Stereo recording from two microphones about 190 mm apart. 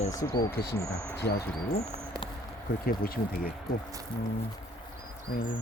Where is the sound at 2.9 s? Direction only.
50° left (ahead or behind).